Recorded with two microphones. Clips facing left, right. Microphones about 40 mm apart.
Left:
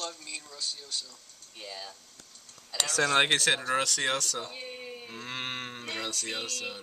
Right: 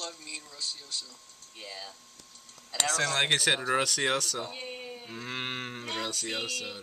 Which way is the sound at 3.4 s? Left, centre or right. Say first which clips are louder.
Even; centre.